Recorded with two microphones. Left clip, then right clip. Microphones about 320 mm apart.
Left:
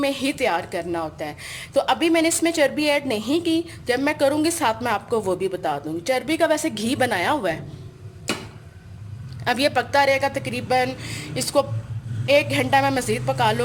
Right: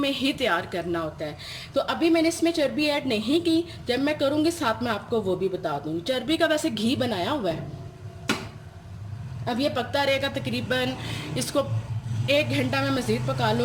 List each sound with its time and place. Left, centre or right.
0.0 s a woman's voice: centre
9.6 s a woman's voice: left